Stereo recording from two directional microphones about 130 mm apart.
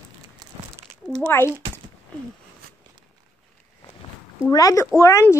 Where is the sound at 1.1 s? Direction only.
10° left (ahead or behind).